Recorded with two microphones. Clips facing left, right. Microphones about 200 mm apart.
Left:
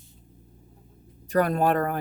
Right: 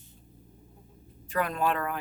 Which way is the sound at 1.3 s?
40° left (ahead or behind).